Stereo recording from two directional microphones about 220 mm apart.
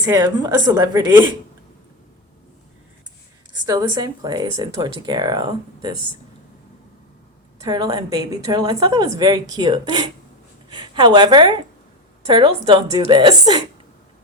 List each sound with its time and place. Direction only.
0.0 s a woman's voice: 20° right (ahead or behind)
3.7 s speech: 20° right (ahead or behind)
7.6 s a woman's voice: 20° right (ahead or behind)